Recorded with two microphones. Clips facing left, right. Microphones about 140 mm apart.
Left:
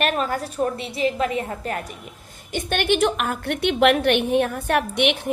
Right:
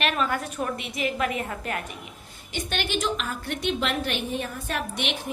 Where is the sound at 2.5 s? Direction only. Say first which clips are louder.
Left 8 dB; 50° left (ahead or behind).